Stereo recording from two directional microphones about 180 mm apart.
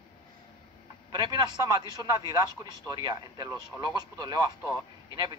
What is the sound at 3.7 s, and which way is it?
Speech, 20° right (ahead or behind).